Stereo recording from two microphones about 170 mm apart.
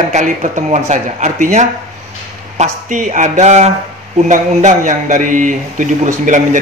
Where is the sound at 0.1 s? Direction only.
45° right (ahead or behind).